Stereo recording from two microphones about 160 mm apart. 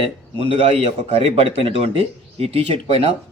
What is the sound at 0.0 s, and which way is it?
A man's voice, 40° right (ahead or behind).